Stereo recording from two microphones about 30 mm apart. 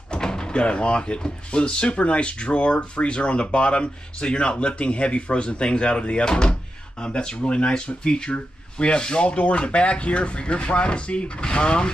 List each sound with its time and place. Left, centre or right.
0.1 s speech: left
7.4 s speech: left